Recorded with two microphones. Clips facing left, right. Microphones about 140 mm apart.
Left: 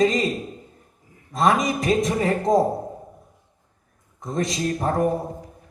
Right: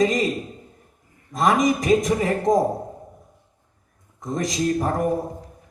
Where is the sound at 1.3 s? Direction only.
30° left (ahead or behind).